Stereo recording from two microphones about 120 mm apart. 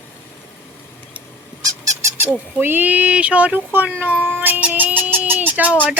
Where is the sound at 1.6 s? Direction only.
30° right (ahead or behind).